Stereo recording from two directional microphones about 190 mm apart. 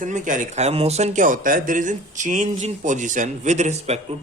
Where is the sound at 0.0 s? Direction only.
45° right (ahead or behind).